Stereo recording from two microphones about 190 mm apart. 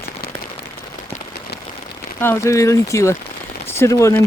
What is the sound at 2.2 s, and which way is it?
Speech, 15° left (ahead or behind).